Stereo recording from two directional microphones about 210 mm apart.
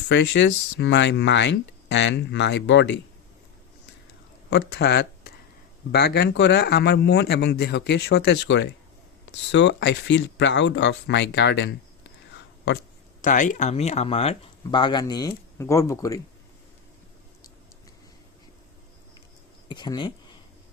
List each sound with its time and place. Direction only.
0.1 s speech: 60° left (ahead or behind)
4.4 s a man's voice: 50° left (ahead or behind)
13.2 s speech: 35° left (ahead or behind); by 16.2 s 15° left (ahead or behind)
19.6 s speech: 20° left (ahead or behind)